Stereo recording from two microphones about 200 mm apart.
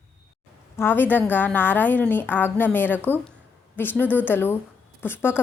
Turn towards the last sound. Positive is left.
turn(degrees=10)  # may be behind; listen again after turning